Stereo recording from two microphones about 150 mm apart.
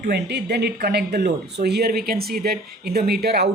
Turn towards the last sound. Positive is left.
turn(degrees=-90)